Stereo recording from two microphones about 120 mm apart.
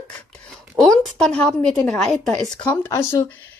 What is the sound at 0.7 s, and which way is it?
A woman's voice, 5° left (ahead or behind).